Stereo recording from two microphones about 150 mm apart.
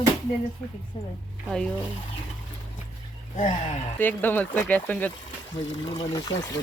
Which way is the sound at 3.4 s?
50° left (ahead or behind).